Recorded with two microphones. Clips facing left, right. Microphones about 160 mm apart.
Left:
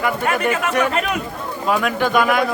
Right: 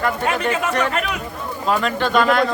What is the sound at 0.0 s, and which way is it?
A man's voice, 10° left (ahead or behind).